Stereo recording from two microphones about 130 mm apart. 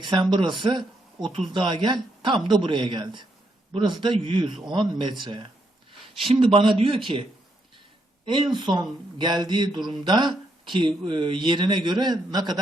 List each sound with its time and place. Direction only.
0.0 s speech: 35° right (ahead or behind)